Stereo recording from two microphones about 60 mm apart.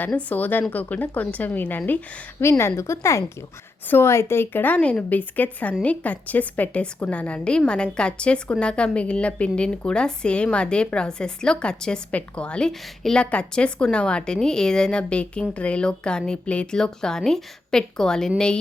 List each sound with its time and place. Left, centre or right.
0.3 s a woman's voice: left
2.4 s speech: left
3.8 s speech: left
4.8 s a woman's voice: left
13.3 s speech: centre